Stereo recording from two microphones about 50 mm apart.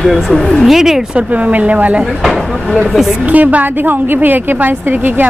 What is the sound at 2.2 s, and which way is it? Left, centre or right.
Speech, centre.